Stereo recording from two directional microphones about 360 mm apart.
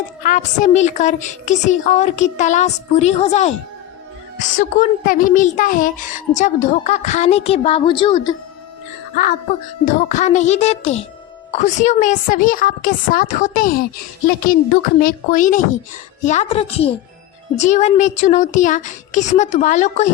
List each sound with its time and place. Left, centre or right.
0.2 s speech: left
9.8 s speech: left
15.0 s a woman's voice: left